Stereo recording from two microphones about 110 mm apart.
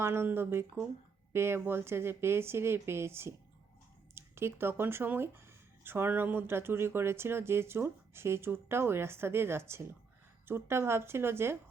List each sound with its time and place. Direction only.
0.0 s speech: 20° right (ahead or behind)